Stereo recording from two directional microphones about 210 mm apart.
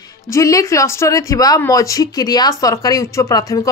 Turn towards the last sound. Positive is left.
turn(degrees=15)  # may be behind; listen again after turning